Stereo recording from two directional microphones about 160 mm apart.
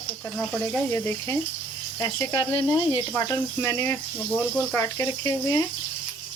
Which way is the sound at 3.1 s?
20° left (ahead or behind).